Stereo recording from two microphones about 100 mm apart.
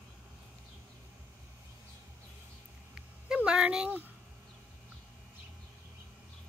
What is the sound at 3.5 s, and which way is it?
Speech, 10° right (ahead or behind).